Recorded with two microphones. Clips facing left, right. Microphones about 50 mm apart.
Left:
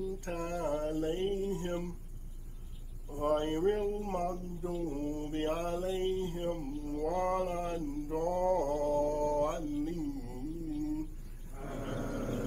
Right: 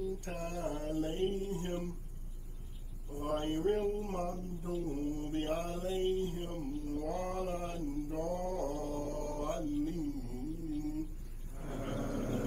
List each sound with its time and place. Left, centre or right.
0.5 s mantra: left
1.3 s speech: left
3.1 s speech: left
3.9 s mantra: left
9.7 s a sound: left